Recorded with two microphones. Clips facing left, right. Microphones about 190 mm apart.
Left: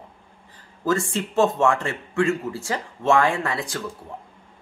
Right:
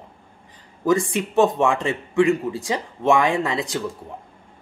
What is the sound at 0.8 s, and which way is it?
Speech, 15° right (ahead or behind).